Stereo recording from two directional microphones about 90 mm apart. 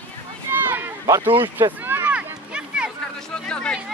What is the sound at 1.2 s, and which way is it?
Speech, 20° right (ahead or behind).